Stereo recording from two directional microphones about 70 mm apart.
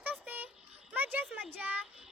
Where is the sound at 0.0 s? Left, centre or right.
Right.